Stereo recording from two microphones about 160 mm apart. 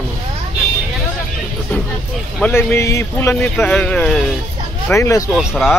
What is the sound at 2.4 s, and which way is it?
A man's voice, 15° left (ahead or behind).